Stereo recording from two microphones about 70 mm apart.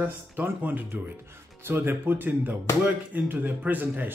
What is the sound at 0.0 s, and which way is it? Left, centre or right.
Speech, right.